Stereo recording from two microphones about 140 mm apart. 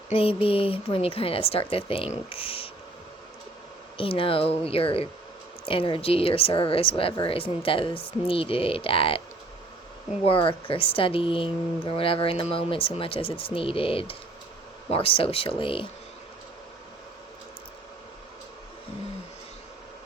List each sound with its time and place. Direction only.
0.1 s speech: 40° left (ahead or behind)
3.9 s speech: 40° left (ahead or behind)
10.2 s speech: 40° left (ahead or behind)